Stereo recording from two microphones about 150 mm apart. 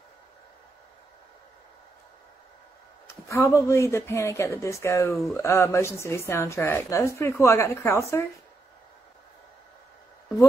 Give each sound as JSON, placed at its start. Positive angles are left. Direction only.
{"t": 3.1, "sound": "speech", "side_deg": 20}
{"t": 5.1, "sound": "speech", "side_deg": 0}
{"t": 5.4, "sound": "a woman's voice", "side_deg": 20}